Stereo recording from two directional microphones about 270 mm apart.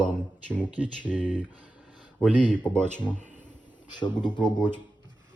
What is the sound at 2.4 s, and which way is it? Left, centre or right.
Speech, centre.